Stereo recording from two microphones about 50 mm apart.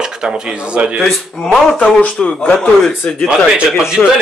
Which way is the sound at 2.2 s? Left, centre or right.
Left.